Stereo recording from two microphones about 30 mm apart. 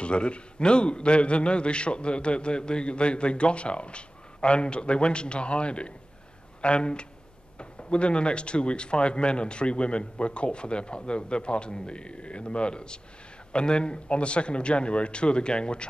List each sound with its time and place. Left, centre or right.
0.0 s a man's voice: left